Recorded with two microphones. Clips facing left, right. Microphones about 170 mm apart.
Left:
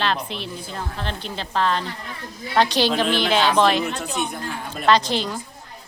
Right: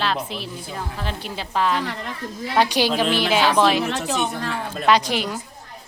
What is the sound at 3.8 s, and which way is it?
Speech, 80° right.